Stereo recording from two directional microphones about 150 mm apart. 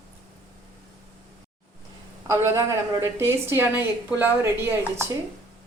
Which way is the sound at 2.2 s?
20° right (ahead or behind).